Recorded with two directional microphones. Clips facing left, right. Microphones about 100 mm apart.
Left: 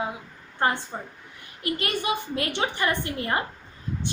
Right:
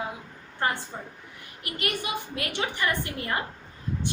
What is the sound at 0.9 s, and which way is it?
A woman's voice, 40° left (ahead or behind).